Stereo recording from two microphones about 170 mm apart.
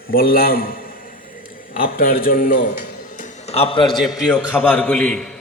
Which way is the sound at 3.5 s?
30° left (ahead or behind).